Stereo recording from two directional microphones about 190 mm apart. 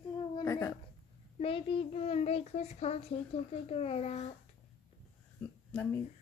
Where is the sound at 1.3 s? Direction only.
30° left (ahead or behind).